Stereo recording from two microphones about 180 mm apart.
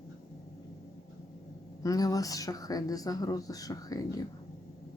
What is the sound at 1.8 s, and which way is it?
Speech, 20° left (ahead or behind).